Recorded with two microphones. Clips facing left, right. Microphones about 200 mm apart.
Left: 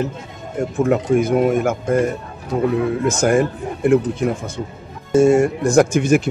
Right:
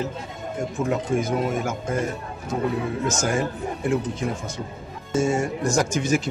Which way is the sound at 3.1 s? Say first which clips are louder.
Left 9 dB; 60° left (ahead or behind).